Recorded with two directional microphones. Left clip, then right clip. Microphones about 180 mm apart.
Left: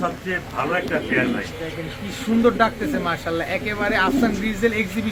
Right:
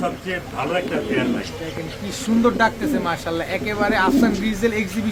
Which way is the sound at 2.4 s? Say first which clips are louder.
Even; centre (ahead or behind).